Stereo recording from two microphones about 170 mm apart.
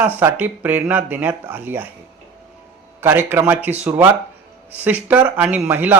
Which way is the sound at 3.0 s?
15° right (ahead or behind).